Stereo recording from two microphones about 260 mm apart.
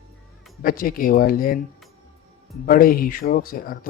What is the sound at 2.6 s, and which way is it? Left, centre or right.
Speech, left.